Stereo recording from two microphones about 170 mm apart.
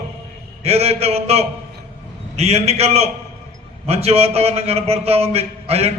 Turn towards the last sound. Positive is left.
turn(degrees=-35)  # may be behind; listen again after turning